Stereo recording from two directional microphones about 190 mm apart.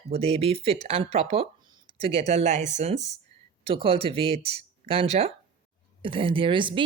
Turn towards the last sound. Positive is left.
turn(degrees=-25)  # may be behind; listen again after turning